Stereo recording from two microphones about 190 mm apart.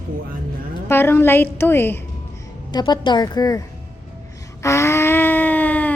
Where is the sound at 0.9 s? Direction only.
10° left (ahead or behind).